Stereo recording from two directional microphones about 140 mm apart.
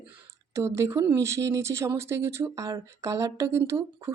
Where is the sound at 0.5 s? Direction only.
20° right (ahead or behind).